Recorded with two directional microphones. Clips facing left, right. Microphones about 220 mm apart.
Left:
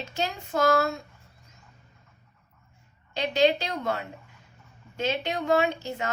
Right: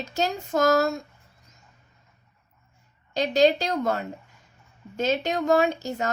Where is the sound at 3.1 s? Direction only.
40° right (ahead or behind).